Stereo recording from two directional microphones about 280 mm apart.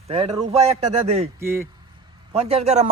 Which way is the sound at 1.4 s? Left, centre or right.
Centre.